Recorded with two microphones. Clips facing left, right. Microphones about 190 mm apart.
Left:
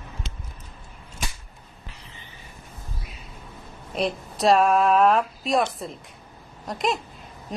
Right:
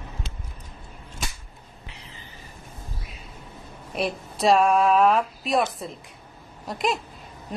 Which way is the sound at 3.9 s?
Centre (ahead or behind).